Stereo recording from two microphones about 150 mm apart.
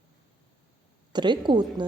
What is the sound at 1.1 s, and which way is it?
Speech, 30° right (ahead or behind).